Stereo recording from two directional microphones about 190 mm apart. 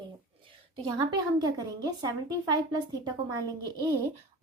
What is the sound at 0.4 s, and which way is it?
A woman's voice, 20° right (ahead or behind).